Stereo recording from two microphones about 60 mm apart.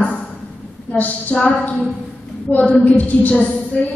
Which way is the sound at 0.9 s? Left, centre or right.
Left.